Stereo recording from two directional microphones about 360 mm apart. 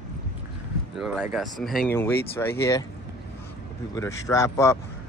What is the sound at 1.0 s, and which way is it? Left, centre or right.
Speech, centre.